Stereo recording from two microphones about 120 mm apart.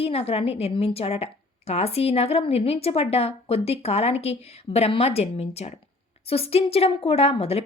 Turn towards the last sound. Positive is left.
turn(degrees=55)  # may be behind; listen again after turning